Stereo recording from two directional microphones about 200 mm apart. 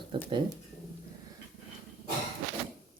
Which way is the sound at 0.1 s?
25° right (ahead or behind).